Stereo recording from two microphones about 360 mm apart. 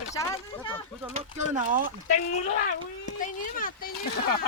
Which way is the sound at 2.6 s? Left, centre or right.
Left.